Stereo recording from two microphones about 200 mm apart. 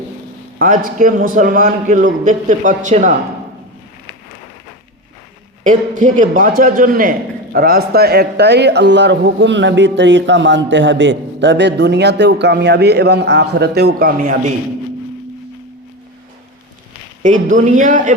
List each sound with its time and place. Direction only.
0.6 s a man's voice: 45° right (ahead or behind)
5.6 s a man's voice: 40° right (ahead or behind)
17.2 s a man's voice: 40° right (ahead or behind)